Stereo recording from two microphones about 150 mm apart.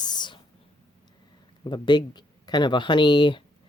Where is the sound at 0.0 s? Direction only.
30° left (ahead or behind).